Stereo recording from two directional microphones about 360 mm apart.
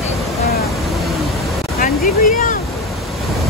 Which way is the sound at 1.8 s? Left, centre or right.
Left.